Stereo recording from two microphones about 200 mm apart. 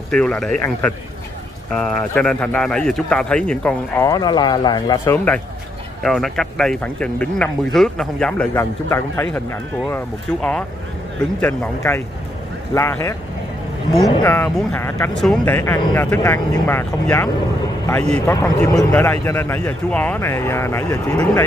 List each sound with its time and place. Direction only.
0.1 s speech: 5° left (ahead or behind)
4.1 s speech: 20° left (ahead or behind)
5.1 s speech: 10° left (ahead or behind)
12.7 s speech: 15° left (ahead or behind)
14.2 s speech: 10° left (ahead or behind)